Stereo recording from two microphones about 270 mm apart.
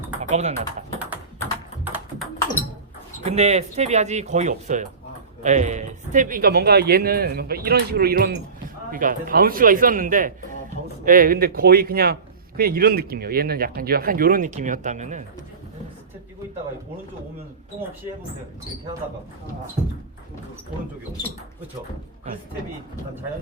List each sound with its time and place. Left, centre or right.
0.2 s typing: right
1.8 s tap: centre
3.2 s speech: right